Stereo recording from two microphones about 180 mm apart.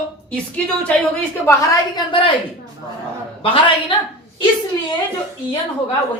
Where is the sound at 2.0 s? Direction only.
30° left (ahead or behind).